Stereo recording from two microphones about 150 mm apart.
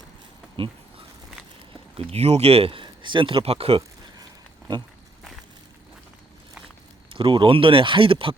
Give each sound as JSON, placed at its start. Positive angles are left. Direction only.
{"t": 0.5, "sound": "a sound", "side_deg": -35}
{"t": 2.0, "sound": "speech", "side_deg": -40}
{"t": 7.1, "sound": "speech", "side_deg": -35}